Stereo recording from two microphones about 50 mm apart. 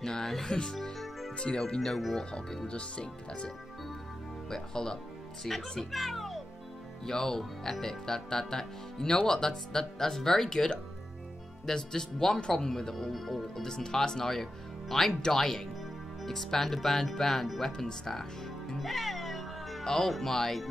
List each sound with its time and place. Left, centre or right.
0.0 s speech: centre
0.8 s music: centre
1.4 s speech: centre
2.0 s speech: centre
2.3 s speech: centre
13.7 s speech: centre